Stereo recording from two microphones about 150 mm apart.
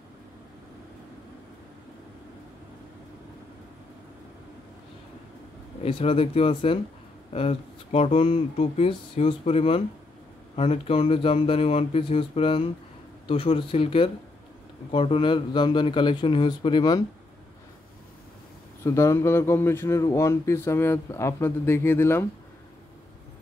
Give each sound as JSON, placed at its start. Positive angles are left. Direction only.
{"t": 5.8, "sound": "speech", "side_deg": 40}
{"t": 18.9, "sound": "speech", "side_deg": 20}